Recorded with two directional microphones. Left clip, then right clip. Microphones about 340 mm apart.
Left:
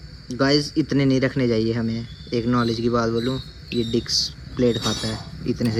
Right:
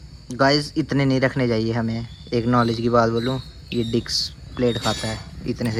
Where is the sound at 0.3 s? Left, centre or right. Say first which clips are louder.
Right 1 dB; centre.